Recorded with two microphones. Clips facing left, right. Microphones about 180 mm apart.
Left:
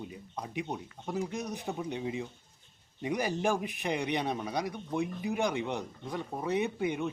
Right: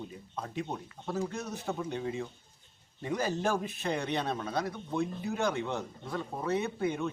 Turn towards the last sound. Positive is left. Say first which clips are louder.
# left 1 dB
turn(degrees=15)  # may be behind; listen again after turning